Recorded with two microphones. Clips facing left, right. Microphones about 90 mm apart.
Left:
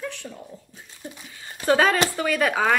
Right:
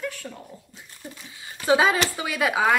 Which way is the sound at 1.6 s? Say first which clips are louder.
Left 1 dB; 15° right (ahead or behind).